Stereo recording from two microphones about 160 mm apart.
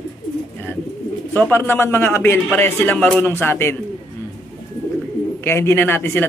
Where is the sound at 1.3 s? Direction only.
15° left (ahead or behind).